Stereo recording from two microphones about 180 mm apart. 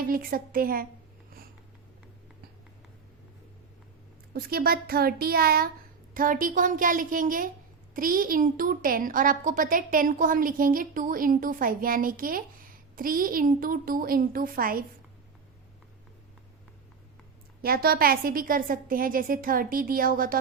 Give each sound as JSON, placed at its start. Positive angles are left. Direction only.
{"t": 0.1, "sound": "a woman's voice", "side_deg": -55}
{"t": 4.4, "sound": "a child's voice", "side_deg": -55}
{"t": 17.6, "sound": "a woman's voice", "side_deg": -55}